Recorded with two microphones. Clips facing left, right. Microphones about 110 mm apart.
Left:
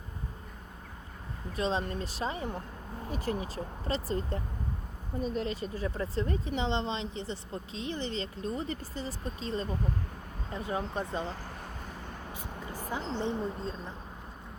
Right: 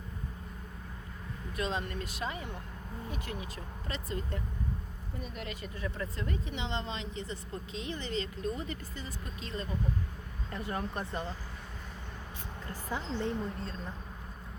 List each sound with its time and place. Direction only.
1.5 s speech: 30° left (ahead or behind)
10.5 s speech: 20° left (ahead or behind)
12.7 s a woman's voice: 15° left (ahead or behind)